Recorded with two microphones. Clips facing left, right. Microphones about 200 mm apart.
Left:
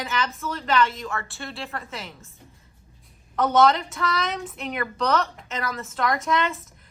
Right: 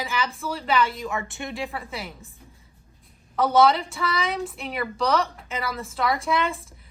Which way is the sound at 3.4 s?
5° right (ahead or behind).